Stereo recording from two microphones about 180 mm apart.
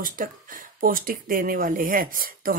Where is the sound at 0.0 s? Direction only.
50° right (ahead or behind).